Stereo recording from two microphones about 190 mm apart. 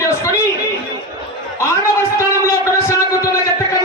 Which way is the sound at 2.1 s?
15° left (ahead or behind).